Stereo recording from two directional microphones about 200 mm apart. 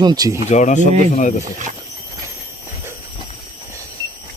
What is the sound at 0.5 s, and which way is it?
Speech, 35° left (ahead or behind).